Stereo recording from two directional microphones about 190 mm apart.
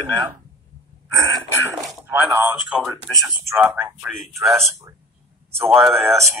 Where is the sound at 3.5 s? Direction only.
15° right (ahead or behind).